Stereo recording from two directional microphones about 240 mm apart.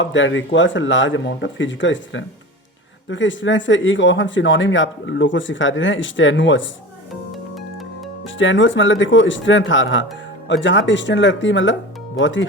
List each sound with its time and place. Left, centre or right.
0.0 s speech: left
7.5 s music: centre
8.4 s speech: left